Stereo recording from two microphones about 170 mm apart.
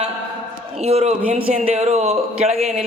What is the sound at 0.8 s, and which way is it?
A man's voice, 40° right (ahead or behind).